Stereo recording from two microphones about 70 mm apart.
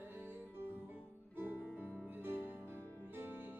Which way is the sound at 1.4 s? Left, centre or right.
Right.